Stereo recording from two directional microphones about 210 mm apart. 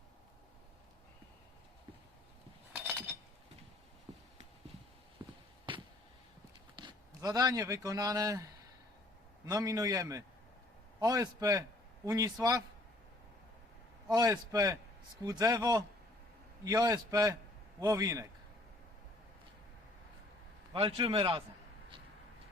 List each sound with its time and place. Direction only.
5.2 s walk: 20° right (ahead or behind)
5.7 s a sound: 25° right (ahead or behind)
6.7 s speech: 20° right (ahead or behind)
9.5 s a man's voice: 15° right (ahead or behind)
14.1 s a man's voice: 15° right (ahead or behind)
20.7 s a man's voice: 25° right (ahead or behind)